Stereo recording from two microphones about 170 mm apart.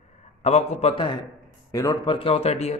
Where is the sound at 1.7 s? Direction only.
20° left (ahead or behind); by 2.8 s 40° left (ahead or behind).